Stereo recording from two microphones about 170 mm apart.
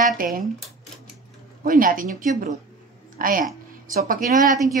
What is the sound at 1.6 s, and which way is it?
A woman's voice, 55° right (ahead or behind).